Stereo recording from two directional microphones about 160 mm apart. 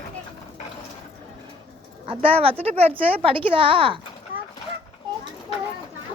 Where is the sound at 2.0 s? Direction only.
35° right (ahead or behind).